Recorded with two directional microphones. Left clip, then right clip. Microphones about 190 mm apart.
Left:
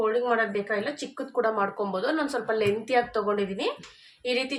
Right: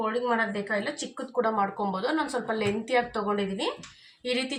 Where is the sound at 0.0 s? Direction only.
20° left (ahead or behind).